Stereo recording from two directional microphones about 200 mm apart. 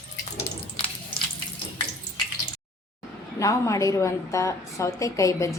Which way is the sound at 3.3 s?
15° left (ahead or behind).